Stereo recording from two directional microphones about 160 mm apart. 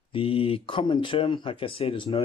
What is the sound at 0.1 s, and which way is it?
Speech, 35° left (ahead or behind).